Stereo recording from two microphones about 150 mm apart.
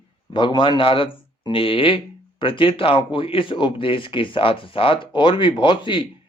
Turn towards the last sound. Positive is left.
turn(degrees=35)  # may be behind; listen again after turning